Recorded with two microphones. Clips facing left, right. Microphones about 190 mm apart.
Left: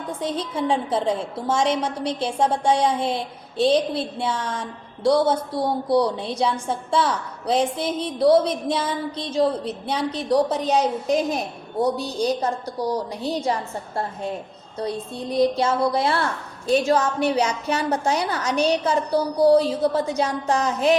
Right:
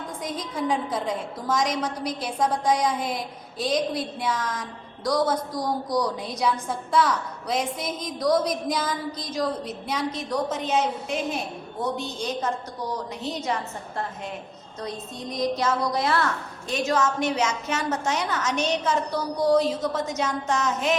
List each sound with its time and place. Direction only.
0.2 s a woman's voice: 30° left (ahead or behind)